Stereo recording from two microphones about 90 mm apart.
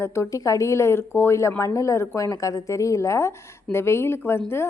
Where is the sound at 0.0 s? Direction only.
30° left (ahead or behind).